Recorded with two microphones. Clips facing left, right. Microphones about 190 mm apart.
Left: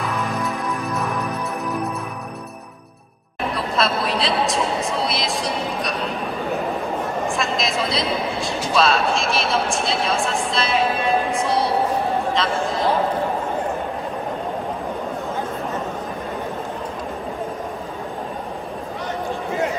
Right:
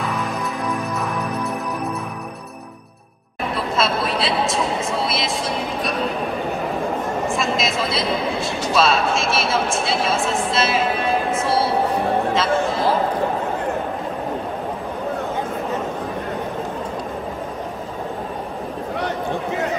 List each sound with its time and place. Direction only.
3.5 s a woman's voice: centre (ahead or behind)
7.3 s speech: centre (ahead or behind)